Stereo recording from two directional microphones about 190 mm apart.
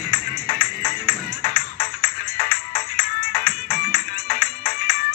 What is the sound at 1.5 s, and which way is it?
Music, 50° left (ahead or behind).